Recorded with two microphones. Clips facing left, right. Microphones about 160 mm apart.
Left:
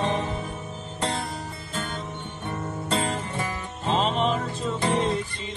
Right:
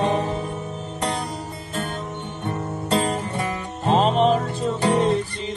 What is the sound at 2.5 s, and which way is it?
Music, 35° right (ahead or behind).